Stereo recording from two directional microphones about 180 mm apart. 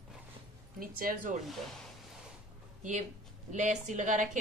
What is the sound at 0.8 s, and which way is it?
Speech, 50° right (ahead or behind).